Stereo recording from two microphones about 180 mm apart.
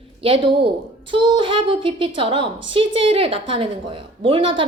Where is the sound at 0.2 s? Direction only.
30° right (ahead or behind).